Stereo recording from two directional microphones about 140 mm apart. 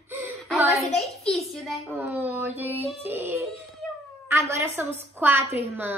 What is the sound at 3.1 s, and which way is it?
A woman's voice, 15° right (ahead or behind).